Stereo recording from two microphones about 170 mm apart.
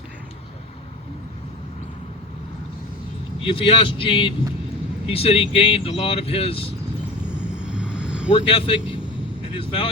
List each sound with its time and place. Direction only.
3.4 s speech: 30° left (ahead or behind)
7.3 s vehicle: 5° right (ahead or behind)
8.3 s speech: 35° left (ahead or behind)